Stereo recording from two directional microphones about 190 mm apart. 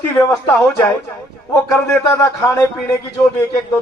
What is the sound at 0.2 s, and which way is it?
Speech, 10° left (ahead or behind).